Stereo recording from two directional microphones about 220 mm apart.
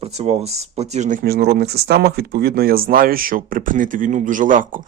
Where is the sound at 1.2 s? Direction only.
45° right (ahead or behind).